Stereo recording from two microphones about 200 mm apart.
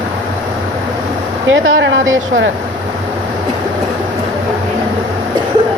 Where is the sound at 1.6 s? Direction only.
75° right (ahead or behind).